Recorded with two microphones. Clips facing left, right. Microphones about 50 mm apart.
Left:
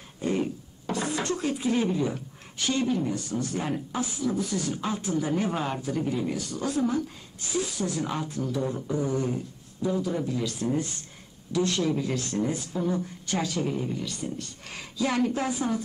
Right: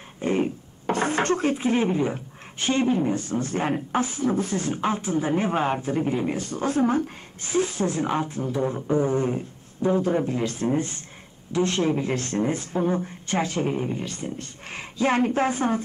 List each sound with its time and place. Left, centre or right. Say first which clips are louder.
0.2 s speech: right 4 dB; right